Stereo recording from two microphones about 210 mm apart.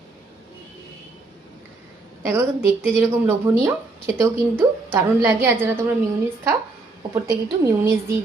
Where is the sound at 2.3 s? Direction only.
10° right (ahead or behind).